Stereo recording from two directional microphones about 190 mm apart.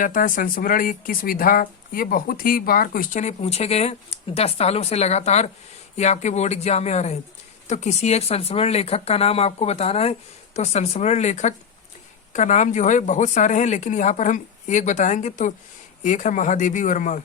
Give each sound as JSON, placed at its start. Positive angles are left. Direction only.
{"t": 0.0, "sound": "speech", "side_deg": 45}